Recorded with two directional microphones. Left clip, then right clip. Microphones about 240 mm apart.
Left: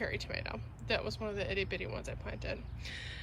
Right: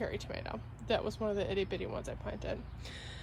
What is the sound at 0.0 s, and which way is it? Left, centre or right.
Speech, centre.